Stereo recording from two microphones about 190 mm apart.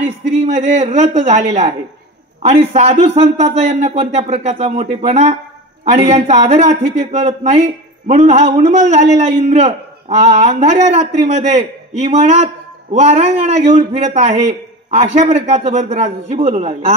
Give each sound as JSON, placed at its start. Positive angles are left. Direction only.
{"t": 0.0, "sound": "a man's voice", "side_deg": -35}